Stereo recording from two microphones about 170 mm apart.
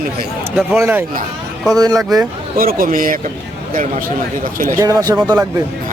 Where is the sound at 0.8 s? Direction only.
15° right (ahead or behind).